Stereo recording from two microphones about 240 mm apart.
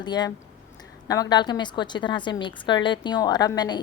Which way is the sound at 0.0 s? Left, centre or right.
Centre.